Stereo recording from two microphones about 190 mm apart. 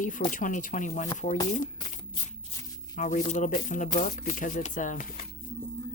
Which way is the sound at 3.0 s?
40° left (ahead or behind).